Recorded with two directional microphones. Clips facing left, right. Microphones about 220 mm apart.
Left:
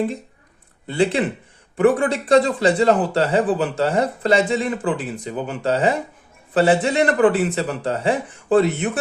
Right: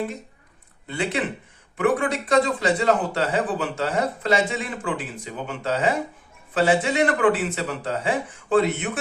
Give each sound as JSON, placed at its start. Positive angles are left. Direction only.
{"t": 0.9, "sound": "speech", "side_deg": 30}